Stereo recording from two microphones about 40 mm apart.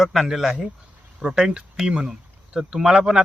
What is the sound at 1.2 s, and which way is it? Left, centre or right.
Speech, centre.